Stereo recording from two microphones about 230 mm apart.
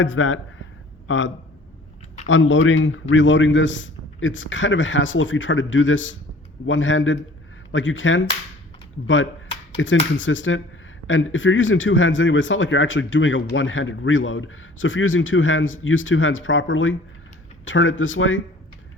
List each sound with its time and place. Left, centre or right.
0.0 s speech: left
9.7 s speech: left